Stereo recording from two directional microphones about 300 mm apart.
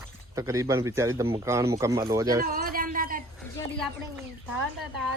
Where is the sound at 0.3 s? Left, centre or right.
Centre.